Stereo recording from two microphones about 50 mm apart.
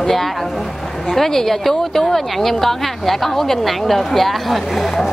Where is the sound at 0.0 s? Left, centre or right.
Centre.